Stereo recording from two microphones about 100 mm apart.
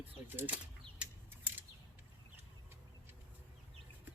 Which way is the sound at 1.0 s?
15° right (ahead or behind).